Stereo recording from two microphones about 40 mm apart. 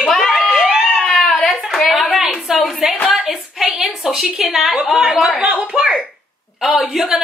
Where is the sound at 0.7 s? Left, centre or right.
Centre.